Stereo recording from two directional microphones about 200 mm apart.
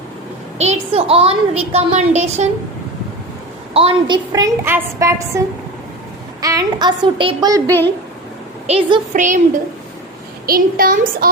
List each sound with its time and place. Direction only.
0.6 s a woman's voice: 30° right (ahead or behind)
3.8 s a woman's voice: 25° right (ahead or behind)
6.4 s a woman's voice: 15° right (ahead or behind)
8.6 s a woman's voice: 30° right (ahead or behind)
10.4 s a child's voice: 45° right (ahead or behind)